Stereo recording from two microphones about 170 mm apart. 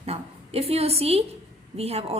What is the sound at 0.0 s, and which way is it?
A woman's voice, 35° right (ahead or behind).